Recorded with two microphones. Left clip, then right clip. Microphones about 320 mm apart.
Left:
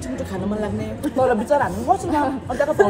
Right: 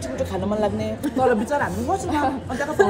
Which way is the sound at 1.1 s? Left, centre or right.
Centre.